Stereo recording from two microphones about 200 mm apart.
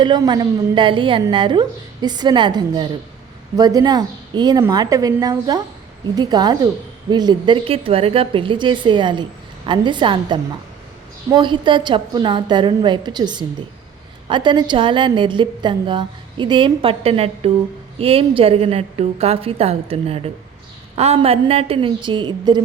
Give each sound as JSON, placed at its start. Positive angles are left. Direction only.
{"t": 0.0, "sound": "a woman's voice", "side_deg": -20}